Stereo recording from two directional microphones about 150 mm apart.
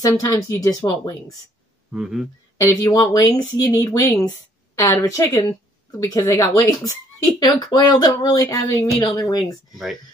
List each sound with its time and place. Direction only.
0.2 s speech: 20° left (ahead or behind)
1.9 s speech: centre (ahead or behind)
2.5 s speech: 25° left (ahead or behind)